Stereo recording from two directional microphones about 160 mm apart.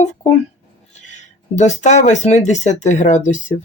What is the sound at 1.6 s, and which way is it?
Speech, 45° left (ahead or behind).